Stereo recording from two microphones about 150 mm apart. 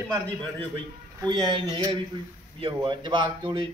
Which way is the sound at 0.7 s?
30° right (ahead or behind).